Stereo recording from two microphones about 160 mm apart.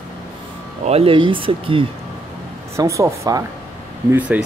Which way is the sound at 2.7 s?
20° right (ahead or behind).